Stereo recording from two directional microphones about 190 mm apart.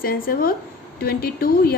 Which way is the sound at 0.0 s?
50° left (ahead or behind).